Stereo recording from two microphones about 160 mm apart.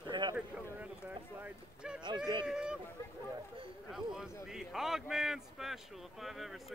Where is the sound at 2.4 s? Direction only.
5° right (ahead or behind).